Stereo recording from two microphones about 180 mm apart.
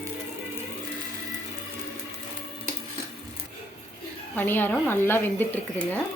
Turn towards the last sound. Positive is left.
turn(degrees=10)  # may be behind; listen again after turning